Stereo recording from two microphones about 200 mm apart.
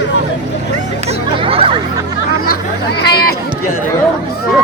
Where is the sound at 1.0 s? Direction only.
30° right (ahead or behind).